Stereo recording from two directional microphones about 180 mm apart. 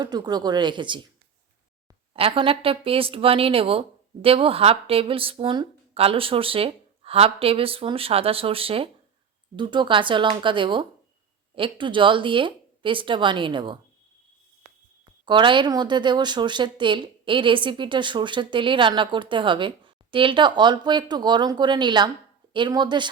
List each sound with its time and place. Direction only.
0.0 s speech: 20° right (ahead or behind)
2.1 s speech: 30° right (ahead or behind)
15.3 s speech: 25° right (ahead or behind)